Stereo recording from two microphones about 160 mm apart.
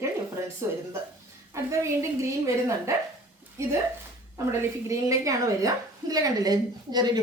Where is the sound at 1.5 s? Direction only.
20° right (ahead or behind).